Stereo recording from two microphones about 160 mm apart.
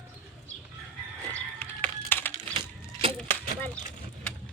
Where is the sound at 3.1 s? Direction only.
10° left (ahead or behind).